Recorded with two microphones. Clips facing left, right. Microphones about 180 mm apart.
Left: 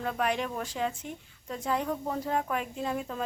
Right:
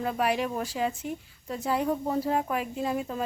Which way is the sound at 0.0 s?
10° right (ahead or behind).